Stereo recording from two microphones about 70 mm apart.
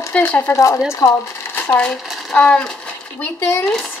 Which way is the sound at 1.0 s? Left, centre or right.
Left.